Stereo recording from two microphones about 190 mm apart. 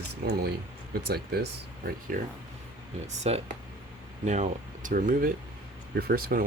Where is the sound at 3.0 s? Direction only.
35° right (ahead or behind).